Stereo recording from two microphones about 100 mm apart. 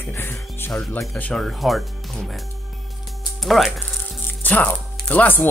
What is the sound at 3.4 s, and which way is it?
Music, centre (ahead or behind).